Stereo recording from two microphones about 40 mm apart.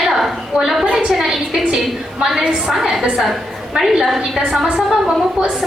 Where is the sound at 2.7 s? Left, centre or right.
Centre.